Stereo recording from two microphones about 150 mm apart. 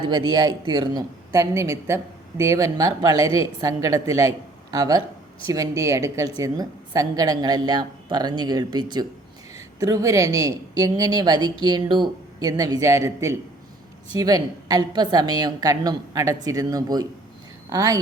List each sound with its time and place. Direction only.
0.1 s a woman's voice: 25° right (ahead or behind)